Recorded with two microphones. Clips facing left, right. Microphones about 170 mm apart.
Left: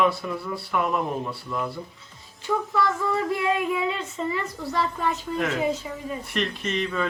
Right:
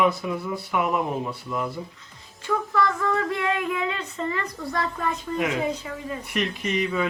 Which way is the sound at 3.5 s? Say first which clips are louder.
Left 2 dB; centre (ahead or behind).